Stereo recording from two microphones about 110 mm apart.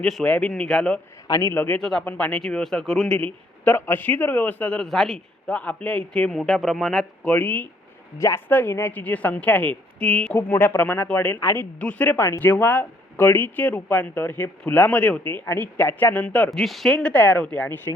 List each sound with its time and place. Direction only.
0.0 s a man's voice: 5° left (ahead or behind)
1.3 s a man's voice: 25° left (ahead or behind); by 7.3 s 5° left (ahead or behind)
7.3 s a man's voice: 15° left (ahead or behind)
10.5 s a man's voice: 20° left (ahead or behind)
16.5 s a man's voice: centre (ahead or behind)